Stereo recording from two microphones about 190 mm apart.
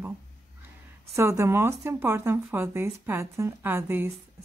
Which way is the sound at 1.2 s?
15° right (ahead or behind).